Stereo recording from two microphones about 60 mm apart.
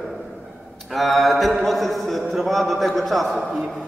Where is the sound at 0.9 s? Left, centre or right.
Centre.